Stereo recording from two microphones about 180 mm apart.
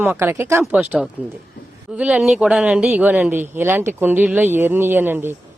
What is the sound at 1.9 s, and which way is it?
Speech, 5° right (ahead or behind).